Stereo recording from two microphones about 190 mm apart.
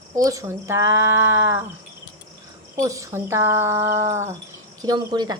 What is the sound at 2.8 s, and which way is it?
Speech, 15° right (ahead or behind).